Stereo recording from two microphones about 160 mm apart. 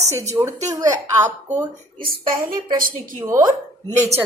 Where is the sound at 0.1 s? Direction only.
20° right (ahead or behind).